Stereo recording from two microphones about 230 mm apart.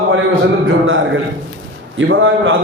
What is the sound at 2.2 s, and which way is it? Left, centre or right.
Speech, right.